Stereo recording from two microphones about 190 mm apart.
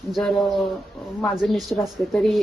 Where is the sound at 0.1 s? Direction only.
5° left (ahead or behind).